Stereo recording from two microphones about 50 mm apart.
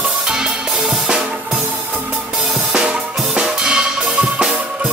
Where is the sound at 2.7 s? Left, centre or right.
Centre.